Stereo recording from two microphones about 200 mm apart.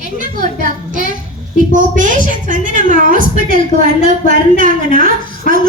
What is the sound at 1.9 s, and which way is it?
A woman's voice, 40° right (ahead or behind).